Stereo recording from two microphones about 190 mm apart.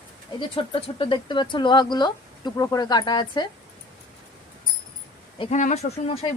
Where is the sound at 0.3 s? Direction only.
25° left (ahead or behind).